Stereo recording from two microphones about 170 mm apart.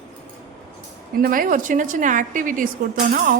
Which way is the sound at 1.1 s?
60° right (ahead or behind).